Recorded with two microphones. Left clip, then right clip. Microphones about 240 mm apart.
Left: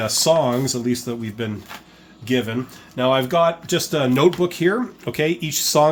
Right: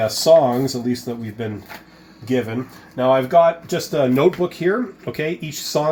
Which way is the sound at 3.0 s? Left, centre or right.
Left.